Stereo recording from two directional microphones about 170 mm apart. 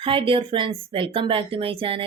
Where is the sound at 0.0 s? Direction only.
30° right (ahead or behind).